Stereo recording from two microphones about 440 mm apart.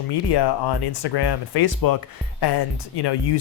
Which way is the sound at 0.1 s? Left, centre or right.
Left.